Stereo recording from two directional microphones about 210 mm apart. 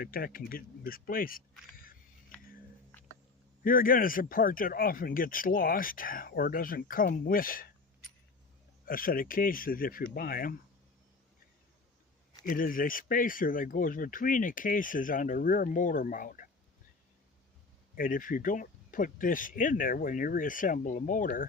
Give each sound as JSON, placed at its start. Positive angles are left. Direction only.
{"t": 0.0, "sound": "speech", "side_deg": 45}
{"t": 3.6, "sound": "speech", "side_deg": 40}
{"t": 8.9, "sound": "speech", "side_deg": 45}
{"t": 12.5, "sound": "speech", "side_deg": 40}
{"t": 17.9, "sound": "speech", "side_deg": 40}